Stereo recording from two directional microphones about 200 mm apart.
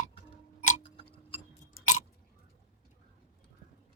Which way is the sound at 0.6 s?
35° left (ahead or behind).